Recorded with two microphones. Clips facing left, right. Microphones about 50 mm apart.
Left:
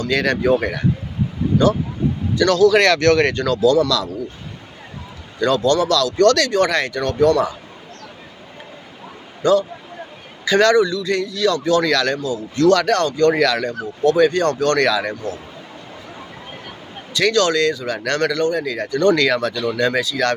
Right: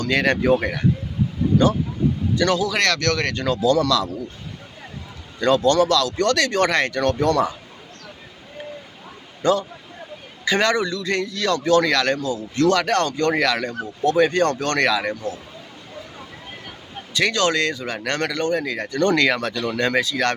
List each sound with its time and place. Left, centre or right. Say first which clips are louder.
0.1 s speech: left 1 dB; right
2.3 s a man's voice: left 4 dB; right
2.7 s speech: left 7 dB; centre
3.0 s speech: left 8 dB; left
3.4 s a man's voice: left 3 dB; right
5.4 s a man's voice: even; right
6.5 s a man's voice: left 2 dB; right
9.4 s a man's voice: left 4 dB; right
10.8 s a man's voice: left 3 dB; right
15.1 s speech: left 1 dB; left
17.2 s a man's voice: left 3 dB; right